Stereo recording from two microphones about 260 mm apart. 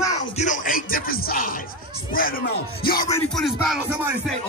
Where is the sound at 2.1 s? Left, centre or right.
Left.